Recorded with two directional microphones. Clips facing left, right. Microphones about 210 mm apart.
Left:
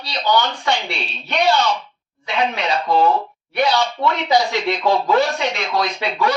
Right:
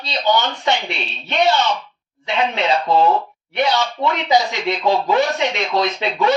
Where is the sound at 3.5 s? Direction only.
20° right (ahead or behind).